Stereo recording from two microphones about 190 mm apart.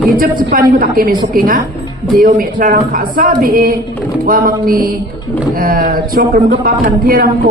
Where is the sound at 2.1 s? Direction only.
50° right (ahead or behind).